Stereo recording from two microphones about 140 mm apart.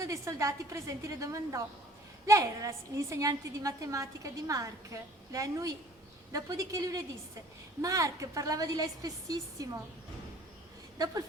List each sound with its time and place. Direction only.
0.0 s a woman's voice: 20° right (ahead or behind)
10.9 s a woman's voice: 25° right (ahead or behind)